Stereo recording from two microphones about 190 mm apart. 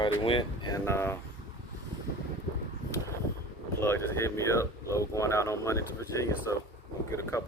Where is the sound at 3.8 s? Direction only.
10° left (ahead or behind).